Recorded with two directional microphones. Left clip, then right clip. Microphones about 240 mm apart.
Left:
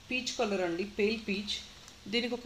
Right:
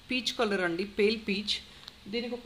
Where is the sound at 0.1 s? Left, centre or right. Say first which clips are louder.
Right 3 dB; right.